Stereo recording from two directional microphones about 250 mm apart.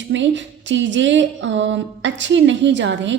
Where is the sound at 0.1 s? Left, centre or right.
Right.